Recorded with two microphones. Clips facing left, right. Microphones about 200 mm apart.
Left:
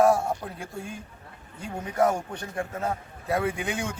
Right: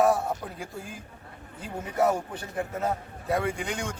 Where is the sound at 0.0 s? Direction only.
Centre (ahead or behind).